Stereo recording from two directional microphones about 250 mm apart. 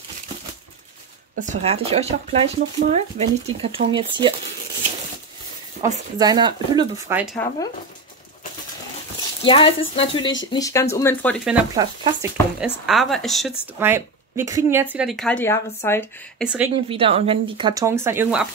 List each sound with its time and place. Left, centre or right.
1.4 s speech: right
6.1 s speech: centre
7.3 s speech: centre
9.4 s speech: left
11.7 s speech: centre
12.5 s speech: centre
16.4 s speech: centre
16.7 s speech: right; by 18.5 s centre